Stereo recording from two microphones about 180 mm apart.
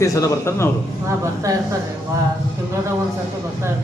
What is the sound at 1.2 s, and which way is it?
Speech, 15° right (ahead or behind).